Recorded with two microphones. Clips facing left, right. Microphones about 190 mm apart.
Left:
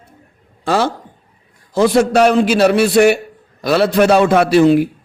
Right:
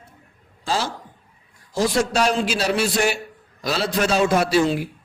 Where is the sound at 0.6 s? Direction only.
65° left (ahead or behind).